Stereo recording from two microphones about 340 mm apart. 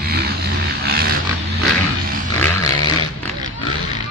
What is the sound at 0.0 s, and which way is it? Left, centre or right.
Vehicle, right.